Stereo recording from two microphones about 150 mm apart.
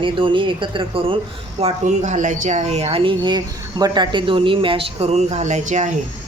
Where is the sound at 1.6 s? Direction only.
50° right (ahead or behind).